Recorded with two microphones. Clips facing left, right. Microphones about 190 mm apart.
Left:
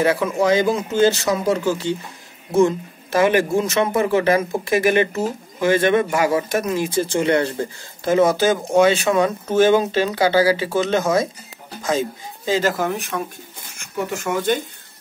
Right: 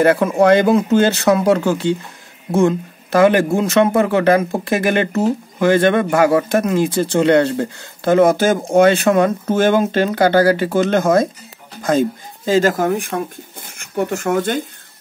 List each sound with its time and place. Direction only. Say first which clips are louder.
0.0 s speech: right 5 dB; 55° right (ahead or behind)
12.4 s speech: right 5 dB; 45° right (ahead or behind)